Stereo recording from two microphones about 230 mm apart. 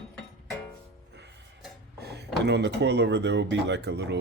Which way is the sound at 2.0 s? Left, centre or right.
Right.